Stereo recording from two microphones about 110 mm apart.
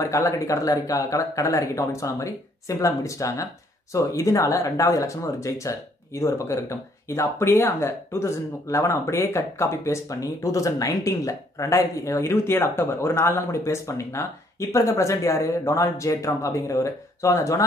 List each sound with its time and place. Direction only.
0.0 s speech: 30° left (ahead or behind)